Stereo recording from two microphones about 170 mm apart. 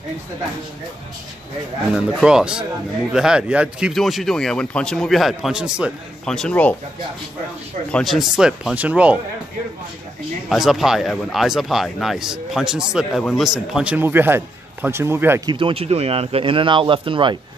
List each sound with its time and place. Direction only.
2.0 s speech: 5° right (ahead or behind)
7.9 s speech: centre (ahead or behind)
10.5 s a man's voice: centre (ahead or behind)
15.4 s speech: 30° right (ahead or behind)